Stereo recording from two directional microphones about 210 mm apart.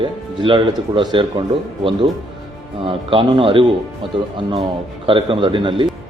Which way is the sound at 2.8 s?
25° right (ahead or behind).